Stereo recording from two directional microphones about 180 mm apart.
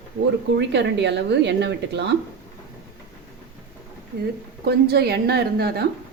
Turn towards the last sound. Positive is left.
turn(degrees=-60)  # may be behind; listen again after turning